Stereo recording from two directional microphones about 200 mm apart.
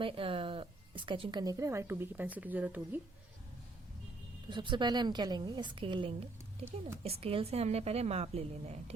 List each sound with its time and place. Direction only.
0.0 s speech: 25° right (ahead or behind); by 3.0 s 10° right (ahead or behind)
4.4 s a woman's voice: 25° right (ahead or behind)